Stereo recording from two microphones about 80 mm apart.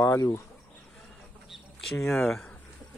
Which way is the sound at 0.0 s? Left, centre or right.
Left.